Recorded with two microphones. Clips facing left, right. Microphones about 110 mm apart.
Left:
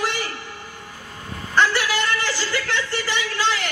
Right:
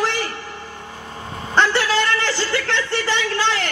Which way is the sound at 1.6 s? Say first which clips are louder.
Right 2 dB; 25° right (ahead or behind).